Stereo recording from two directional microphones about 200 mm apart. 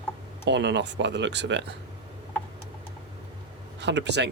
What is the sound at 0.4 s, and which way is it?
Speech, 60° right (ahead or behind).